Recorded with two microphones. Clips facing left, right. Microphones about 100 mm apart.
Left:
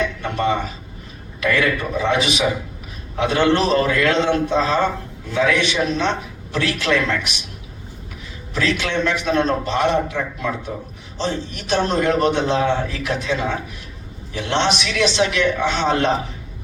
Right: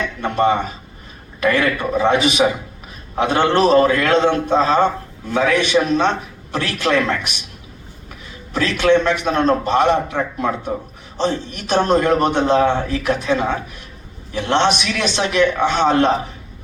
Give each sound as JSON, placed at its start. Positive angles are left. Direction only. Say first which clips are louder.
{"t": 0.2, "sound": "a man's voice", "louder": "right 4 dB", "side_deg": -45}
{"t": 8.5, "sound": "a man's voice", "louder": "right 6 dB", "side_deg": -50}